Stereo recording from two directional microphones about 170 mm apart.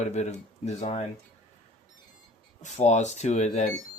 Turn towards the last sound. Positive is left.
turn(degrees=45)  # may be behind; listen again after turning